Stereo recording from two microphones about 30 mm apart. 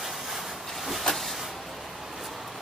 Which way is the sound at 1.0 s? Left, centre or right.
Centre.